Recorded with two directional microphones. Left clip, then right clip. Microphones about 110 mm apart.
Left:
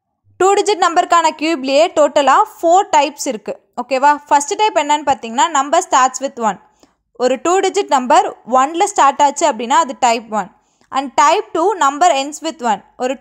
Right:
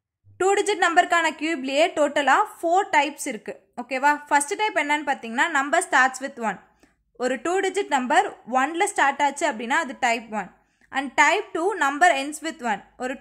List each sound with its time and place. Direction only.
0.4 s a woman's voice: 50° left (ahead or behind)